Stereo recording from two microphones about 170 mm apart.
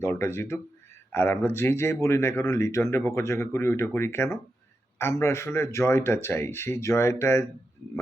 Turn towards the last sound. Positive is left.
turn(degrees=15)  # may be behind; listen again after turning